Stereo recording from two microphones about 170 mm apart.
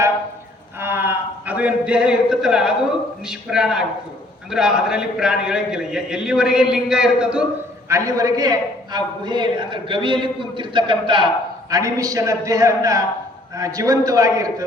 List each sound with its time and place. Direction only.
0.8 s a sound: 15° right (ahead or behind)
3.2 s a man's voice: 5° right (ahead or behind)
7.9 s a man's voice: 20° right (ahead or behind)